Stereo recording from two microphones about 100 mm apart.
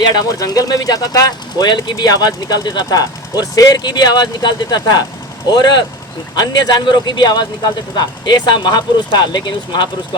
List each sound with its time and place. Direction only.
0.0 s speech: 40° left (ahead or behind)